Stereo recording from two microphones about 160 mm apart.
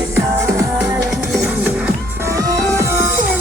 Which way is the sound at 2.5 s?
20° right (ahead or behind).